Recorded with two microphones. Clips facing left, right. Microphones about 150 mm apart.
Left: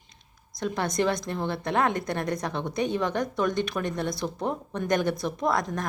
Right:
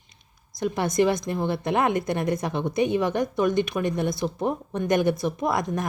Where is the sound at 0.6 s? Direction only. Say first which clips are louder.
Right 4 dB; 5° right (ahead or behind).